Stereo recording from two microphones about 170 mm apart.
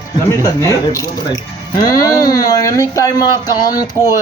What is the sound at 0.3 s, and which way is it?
Speech, 20° left (ahead or behind).